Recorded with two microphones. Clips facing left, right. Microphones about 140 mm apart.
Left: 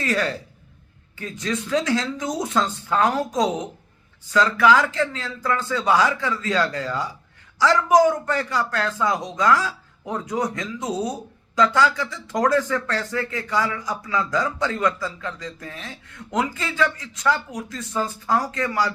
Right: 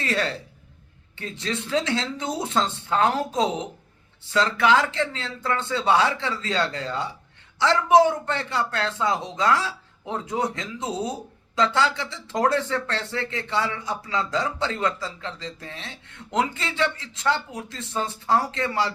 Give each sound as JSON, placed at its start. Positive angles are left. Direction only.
{"t": 0.0, "sound": "speech", "side_deg": -30}